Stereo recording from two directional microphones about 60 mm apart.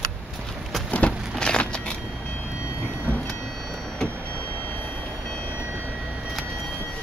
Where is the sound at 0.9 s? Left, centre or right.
Centre.